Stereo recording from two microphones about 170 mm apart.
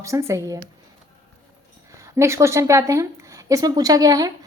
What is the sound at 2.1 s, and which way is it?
A woman's voice, 15° right (ahead or behind).